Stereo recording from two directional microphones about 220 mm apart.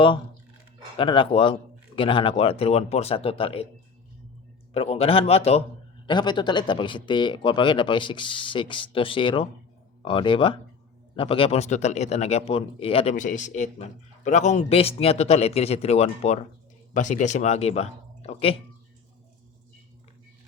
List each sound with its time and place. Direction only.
0.9 s a man's voice: 25° left (ahead or behind)
4.7 s a man's voice: 25° left (ahead or behind)